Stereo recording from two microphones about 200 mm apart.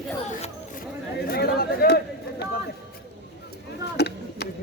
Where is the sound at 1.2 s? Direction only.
50° left (ahead or behind).